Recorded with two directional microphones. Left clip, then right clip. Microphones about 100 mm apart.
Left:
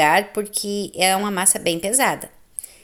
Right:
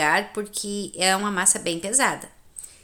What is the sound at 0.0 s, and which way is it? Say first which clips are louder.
Speech: left 5 dB; 40° left (ahead or behind).